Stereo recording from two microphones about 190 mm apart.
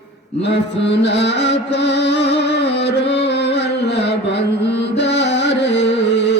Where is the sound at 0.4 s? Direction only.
65° left (ahead or behind).